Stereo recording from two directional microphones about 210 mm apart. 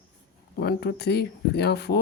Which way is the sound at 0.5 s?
50° left (ahead or behind).